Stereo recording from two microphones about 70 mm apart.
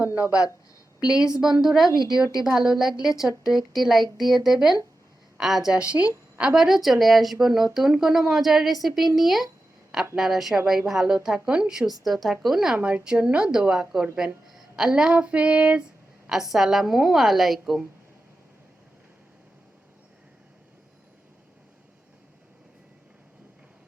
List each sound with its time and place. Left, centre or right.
0.1 s speech: right
0.9 s a woman's voice: centre
12.7 s a woman's voice: centre